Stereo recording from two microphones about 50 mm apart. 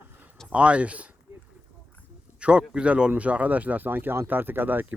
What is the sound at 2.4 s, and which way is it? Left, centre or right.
Speech, right.